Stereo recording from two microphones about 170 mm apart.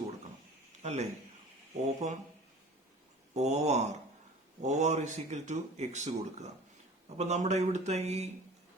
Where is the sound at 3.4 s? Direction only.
40° right (ahead or behind).